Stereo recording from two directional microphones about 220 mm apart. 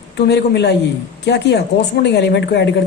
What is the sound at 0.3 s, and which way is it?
Speech, 50° left (ahead or behind).